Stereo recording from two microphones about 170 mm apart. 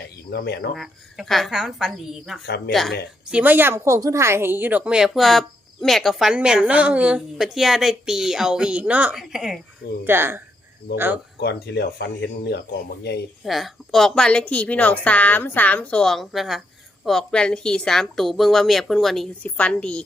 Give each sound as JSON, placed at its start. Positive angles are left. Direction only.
{"t": 0.3, "sound": "speech", "side_deg": 75}
{"t": 0.7, "sound": "a woman's voice", "side_deg": 0}
{"t": 10.0, "sound": "speech", "side_deg": -15}
{"t": 11.3, "sound": "speech", "side_deg": 75}
{"t": 13.4, "sound": "a woman's voice", "side_deg": 0}